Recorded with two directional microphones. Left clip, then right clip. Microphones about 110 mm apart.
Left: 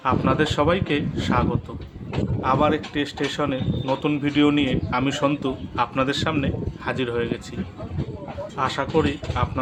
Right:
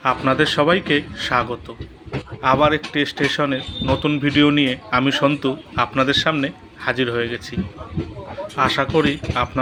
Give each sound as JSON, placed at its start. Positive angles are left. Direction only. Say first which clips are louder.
{"t": 0.0, "sound": "speech", "louder": "right 4 dB", "side_deg": -25}
{"t": 8.5, "sound": "speech", "louder": "right 5 dB", "side_deg": -25}